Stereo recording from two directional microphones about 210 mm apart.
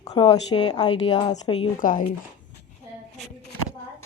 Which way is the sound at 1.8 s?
40° left (ahead or behind).